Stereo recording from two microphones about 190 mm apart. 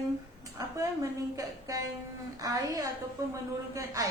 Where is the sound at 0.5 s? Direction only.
15° right (ahead or behind).